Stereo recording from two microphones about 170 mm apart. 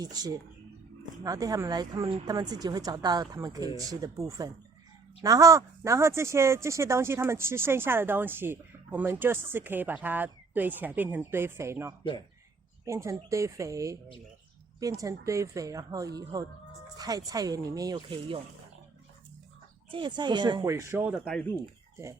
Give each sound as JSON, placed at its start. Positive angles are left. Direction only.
{"t": 0.0, "sound": "speech", "side_deg": -25}
{"t": 19.9, "sound": "speech", "side_deg": -25}
{"t": 21.2, "sound": "speech", "side_deg": 5}